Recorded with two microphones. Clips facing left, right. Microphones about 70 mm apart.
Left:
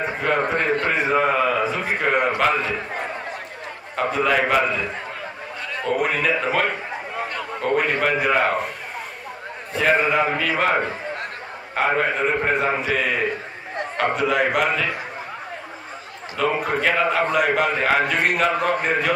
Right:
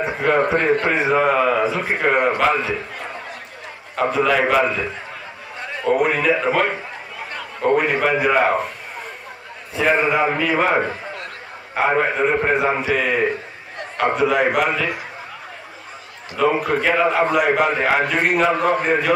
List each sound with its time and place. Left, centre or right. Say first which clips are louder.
0.0 s a man's voice: right 3 dB; centre
0.6 s a man's voice: right 3 dB; centre
0.9 s a man's voice: right 2 dB; centre
3.9 s a man's voice: right 2 dB; centre
5.9 s a man's voice: right 4 dB; centre
9.8 s a man's voice: right 1 dB; centre
16.3 s a man's voice: right 4 dB; centre